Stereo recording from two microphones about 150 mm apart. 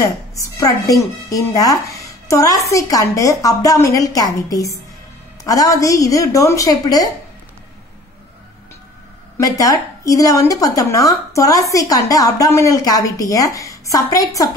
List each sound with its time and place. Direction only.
0.0 s a woman's voice: 20° left (ahead or behind)
9.4 s a woman's voice: 25° left (ahead or behind)